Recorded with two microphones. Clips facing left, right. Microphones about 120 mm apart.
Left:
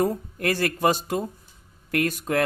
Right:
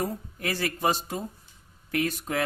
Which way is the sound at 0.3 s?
55° left (ahead or behind).